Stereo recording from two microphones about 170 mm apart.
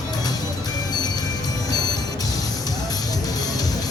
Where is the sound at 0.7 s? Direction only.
25° left (ahead or behind).